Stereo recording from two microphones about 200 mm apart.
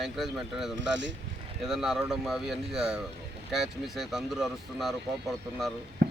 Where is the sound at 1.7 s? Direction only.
Centre (ahead or behind).